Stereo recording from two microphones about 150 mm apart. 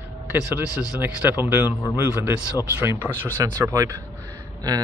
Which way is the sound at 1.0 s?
15° right (ahead or behind).